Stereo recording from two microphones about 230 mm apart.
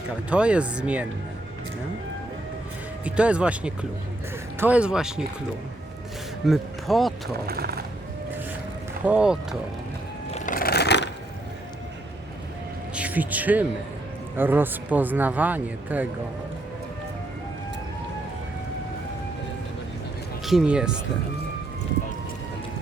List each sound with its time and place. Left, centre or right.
0.3 s speech: centre
3.0 s speech: centre
6.4 s speech: centre
7.4 s speech: right
9.0 s speech: centre
10.3 s a sound: left
12.9 s speech: centre
20.4 s speech: centre